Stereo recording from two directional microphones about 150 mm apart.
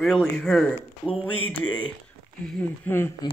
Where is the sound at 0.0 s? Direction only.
5° left (ahead or behind).